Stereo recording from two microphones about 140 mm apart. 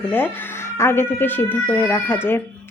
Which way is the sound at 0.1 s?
15° left (ahead or behind).